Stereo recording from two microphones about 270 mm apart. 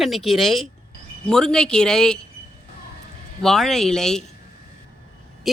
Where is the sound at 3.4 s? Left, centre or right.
Centre.